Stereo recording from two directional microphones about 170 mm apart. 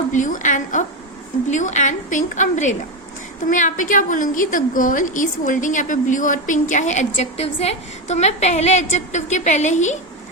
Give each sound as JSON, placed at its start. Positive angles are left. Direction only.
{"t": 0.1, "sound": "a woman's voice", "side_deg": 50}